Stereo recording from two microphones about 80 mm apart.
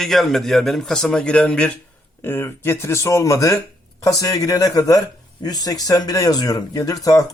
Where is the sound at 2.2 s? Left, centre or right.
Left.